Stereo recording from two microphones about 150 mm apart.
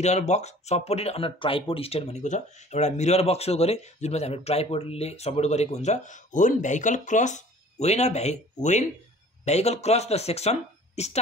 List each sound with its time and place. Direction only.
0.0 s speech: 50° left (ahead or behind)
9.4 s speech: 45° left (ahead or behind)